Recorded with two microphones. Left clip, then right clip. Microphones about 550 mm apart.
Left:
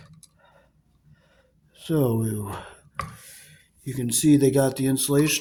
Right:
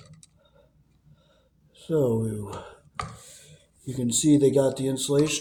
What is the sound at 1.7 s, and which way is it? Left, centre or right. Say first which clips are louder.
Speech: even; left.